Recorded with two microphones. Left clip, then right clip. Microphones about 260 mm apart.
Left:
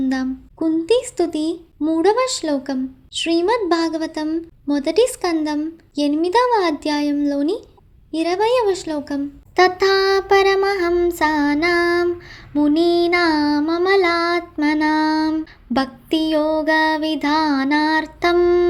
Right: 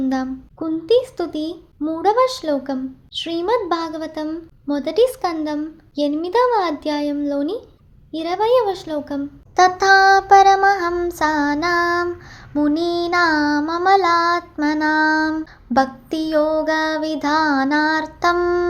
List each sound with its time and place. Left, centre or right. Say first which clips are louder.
0.0 s a sound: even; left
0.9 s speech: right 4 dB; left
3.3 s a woman's voice: left 2 dB; left
4.7 s speech: even; left
7.3 s a woman's voice: left 2 dB; left
8.1 s speech: even; left
9.6 s child singing: right 3 dB; left